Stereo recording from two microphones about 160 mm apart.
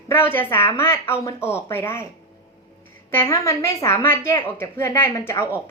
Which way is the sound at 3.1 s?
20° left (ahead or behind).